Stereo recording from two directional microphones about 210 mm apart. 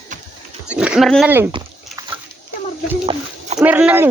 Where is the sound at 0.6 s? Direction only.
5° right (ahead or behind).